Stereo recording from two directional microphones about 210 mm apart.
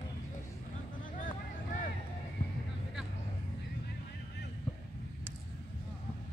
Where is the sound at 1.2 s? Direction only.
40° left (ahead or behind).